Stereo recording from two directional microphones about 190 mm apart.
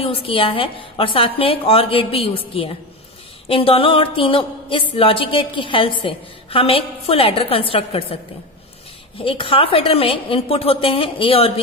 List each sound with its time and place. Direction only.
0.0 s music: 30° left (ahead or behind)
9.2 s music: 30° left (ahead or behind)